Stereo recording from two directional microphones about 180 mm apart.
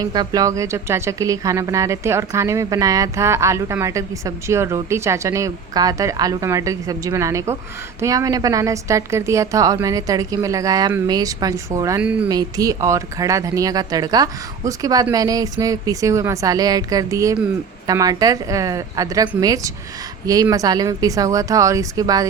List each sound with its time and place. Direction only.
0.0 s a woman's voice: 20° right (ahead or behind)
12.0 s speech: 5° right (ahead or behind)
12.3 s a woman's voice: 20° right (ahead or behind)